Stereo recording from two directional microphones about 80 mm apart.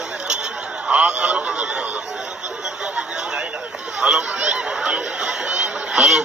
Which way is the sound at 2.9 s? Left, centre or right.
Centre.